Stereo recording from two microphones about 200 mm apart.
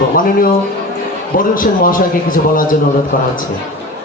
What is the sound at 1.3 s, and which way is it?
A man's voice, 45° left (ahead or behind).